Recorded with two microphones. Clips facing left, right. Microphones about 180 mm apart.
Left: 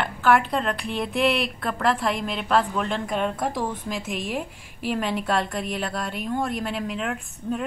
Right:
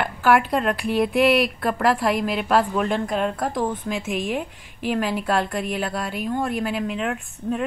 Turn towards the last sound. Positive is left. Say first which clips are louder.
# right 2 dB
turn(degrees=0)  # may be behind; listen again after turning